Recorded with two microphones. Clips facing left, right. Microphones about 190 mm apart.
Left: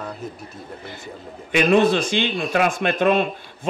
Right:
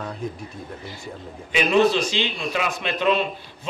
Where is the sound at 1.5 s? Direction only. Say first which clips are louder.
Left 2 dB; 55° left (ahead or behind).